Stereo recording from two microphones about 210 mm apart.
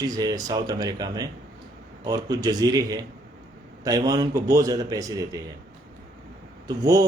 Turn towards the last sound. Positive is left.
turn(degrees=-15)  # may be behind; listen again after turning